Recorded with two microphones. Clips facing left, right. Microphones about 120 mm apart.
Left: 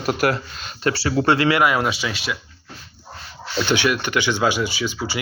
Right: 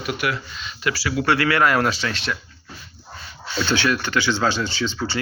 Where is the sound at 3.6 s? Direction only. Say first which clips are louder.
Left 1 dB; 15° left (ahead or behind).